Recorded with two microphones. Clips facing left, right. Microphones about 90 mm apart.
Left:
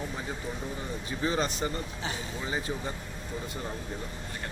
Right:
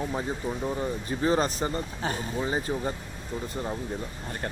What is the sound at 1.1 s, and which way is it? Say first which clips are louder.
Speech: right 4 dB; 40° right (ahead or behind).